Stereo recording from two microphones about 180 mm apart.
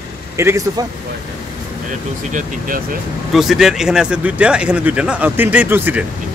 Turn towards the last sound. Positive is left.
turn(degrees=-10)  # may be behind; listen again after turning